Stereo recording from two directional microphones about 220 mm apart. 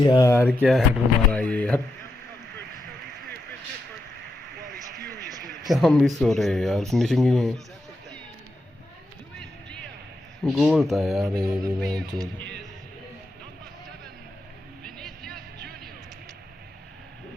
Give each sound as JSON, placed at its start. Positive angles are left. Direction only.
{"t": 0.0, "sound": "speech", "side_deg": 15}
{"t": 0.5, "sound": "speech", "side_deg": 0}
{"t": 5.5, "sound": "speech", "side_deg": 0}
{"t": 9.3, "sound": "a sound", "side_deg": 5}
{"t": 10.5, "sound": "speech", "side_deg": 0}
{"t": 11.3, "sound": "music", "side_deg": -15}
{"t": 11.8, "sound": "speech", "side_deg": 0}
{"t": 12.4, "sound": "music", "side_deg": 5}
{"t": 14.8, "sound": "a sound", "side_deg": 0}